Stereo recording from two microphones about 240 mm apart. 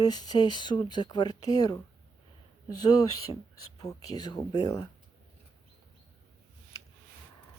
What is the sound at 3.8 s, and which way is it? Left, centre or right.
Speech, centre.